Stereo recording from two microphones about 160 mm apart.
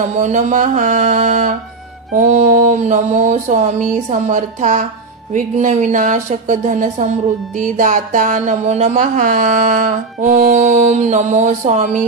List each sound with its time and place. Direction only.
0.2 s speech: 50° right (ahead or behind)